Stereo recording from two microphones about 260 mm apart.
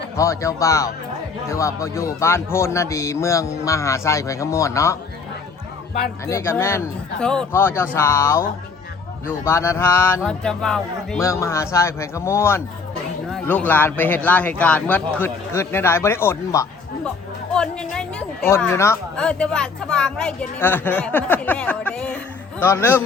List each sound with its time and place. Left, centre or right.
0.2 s speech: centre
6.2 s speech: centre
9.4 s speech: centre